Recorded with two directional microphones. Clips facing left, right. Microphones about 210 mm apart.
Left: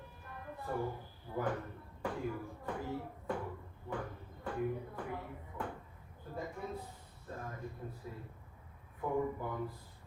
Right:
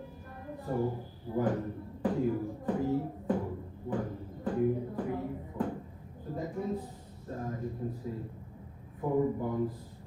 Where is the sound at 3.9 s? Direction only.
35° right (ahead or behind).